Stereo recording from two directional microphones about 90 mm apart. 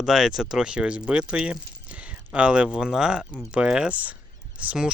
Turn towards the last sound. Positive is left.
turn(degrees=-10)  # may be behind; listen again after turning